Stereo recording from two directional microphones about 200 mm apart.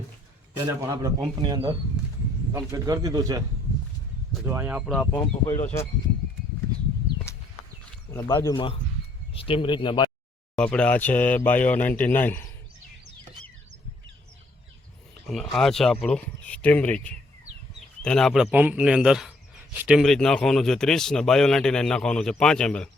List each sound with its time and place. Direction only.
0.9 s speech: 15° right (ahead or behind)
4.4 s speech: 10° right (ahead or behind)
4.9 s speech: 5° left (ahead or behind)
5.2 s speech: 30° left (ahead or behind)
8.1 s speech: 15° left (ahead or behind)
10.5 s speech: 5° left (ahead or behind)
15.3 s speech: centre (ahead or behind)
17.7 s a sound: 5° left (ahead or behind)
18.5 s speech: 5° right (ahead or behind)